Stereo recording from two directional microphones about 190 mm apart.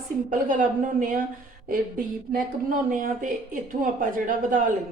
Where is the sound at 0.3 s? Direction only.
45° right (ahead or behind).